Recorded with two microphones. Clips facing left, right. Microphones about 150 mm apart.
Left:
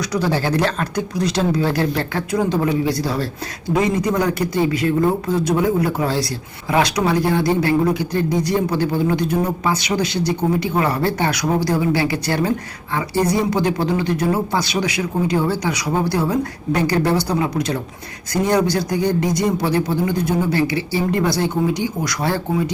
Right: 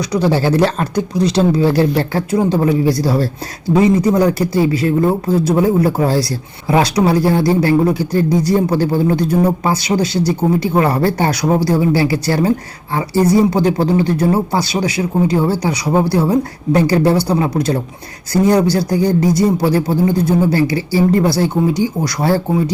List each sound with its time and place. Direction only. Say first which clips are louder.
0.0 s speech: right 5 dB; 25° right (ahead or behind)